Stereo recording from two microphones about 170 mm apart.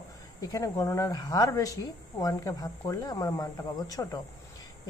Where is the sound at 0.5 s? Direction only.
20° left (ahead or behind).